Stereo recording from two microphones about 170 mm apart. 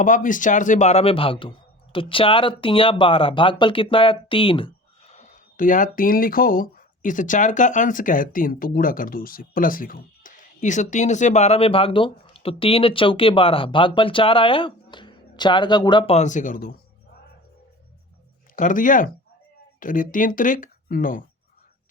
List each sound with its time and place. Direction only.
0.0 s speech: 50° left (ahead or behind); by 16.1 s 25° left (ahead or behind)
16.1 s speech: 45° left (ahead or behind)
18.5 s speech: 50° left (ahead or behind)